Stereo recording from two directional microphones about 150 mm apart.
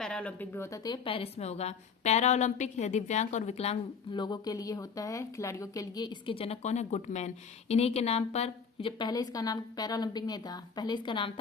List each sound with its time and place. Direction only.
0.0 s a woman's voice: 5° left (ahead or behind); by 4.2 s 40° left (ahead or behind)
4.2 s speech: 25° left (ahead or behind)